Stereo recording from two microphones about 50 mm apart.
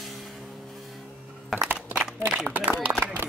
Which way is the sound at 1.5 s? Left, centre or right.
Centre.